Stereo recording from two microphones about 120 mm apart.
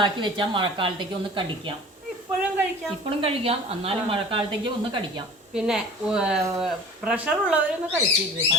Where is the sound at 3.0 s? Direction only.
50° right (ahead or behind).